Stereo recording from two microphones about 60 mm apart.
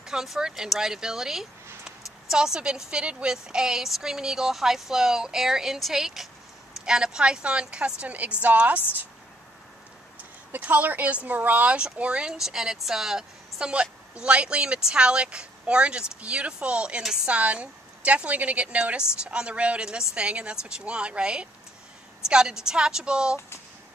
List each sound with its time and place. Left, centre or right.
0.0 s speech: centre; by 8.8 s right
10.5 s a woman's voice: right; by 17.3 s centre
17.3 s a woman's voice: right